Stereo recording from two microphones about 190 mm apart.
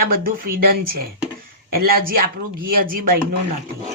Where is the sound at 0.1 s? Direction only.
50° right (ahead or behind).